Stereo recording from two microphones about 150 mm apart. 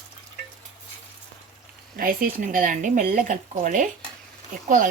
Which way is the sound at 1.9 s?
70° right (ahead or behind).